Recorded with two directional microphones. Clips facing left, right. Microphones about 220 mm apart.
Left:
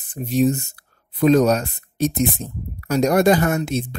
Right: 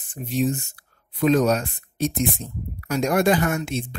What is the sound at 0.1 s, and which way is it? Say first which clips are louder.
Speech: left 5 dB; 40° left (ahead or behind).